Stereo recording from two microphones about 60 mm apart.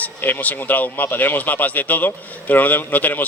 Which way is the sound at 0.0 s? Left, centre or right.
Left.